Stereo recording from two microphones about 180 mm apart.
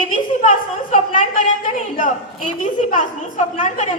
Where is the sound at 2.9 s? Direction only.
45° left (ahead or behind).